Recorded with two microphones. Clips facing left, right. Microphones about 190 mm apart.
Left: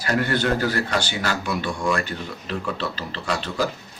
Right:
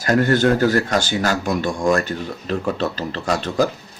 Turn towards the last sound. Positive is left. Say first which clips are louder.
# right 6 dB
turn(degrees=-45)  # may be behind; listen again after turning